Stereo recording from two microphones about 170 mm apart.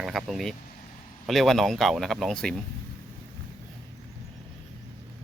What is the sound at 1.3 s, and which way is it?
Speech, centre (ahead or behind).